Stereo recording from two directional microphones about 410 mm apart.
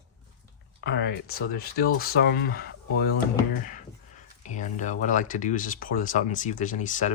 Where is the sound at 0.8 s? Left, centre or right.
Left.